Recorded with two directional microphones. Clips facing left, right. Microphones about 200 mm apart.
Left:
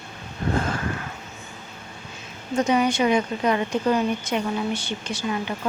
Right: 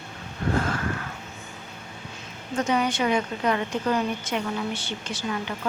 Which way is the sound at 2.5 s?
15° left (ahead or behind).